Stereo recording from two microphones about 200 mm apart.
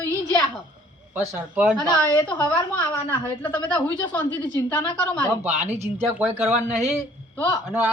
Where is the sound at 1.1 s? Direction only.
5° right (ahead or behind).